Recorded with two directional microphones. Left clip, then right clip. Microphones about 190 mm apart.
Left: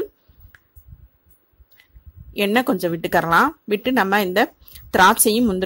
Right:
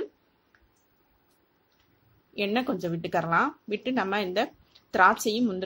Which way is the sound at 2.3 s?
50° left (ahead or behind).